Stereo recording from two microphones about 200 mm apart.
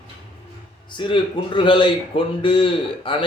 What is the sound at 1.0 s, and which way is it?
A man's voice, 25° left (ahead or behind).